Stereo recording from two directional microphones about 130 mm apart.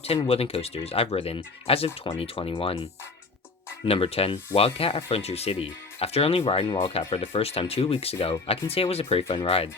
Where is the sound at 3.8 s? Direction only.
50° left (ahead or behind).